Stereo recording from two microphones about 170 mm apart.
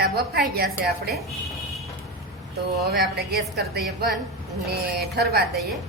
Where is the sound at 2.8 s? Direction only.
70° right (ahead or behind).